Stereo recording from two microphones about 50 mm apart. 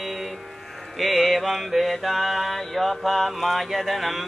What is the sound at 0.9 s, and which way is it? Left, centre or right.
Mantra, centre.